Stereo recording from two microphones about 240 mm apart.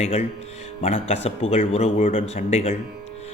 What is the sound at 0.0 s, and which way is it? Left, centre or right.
A man's voice, left.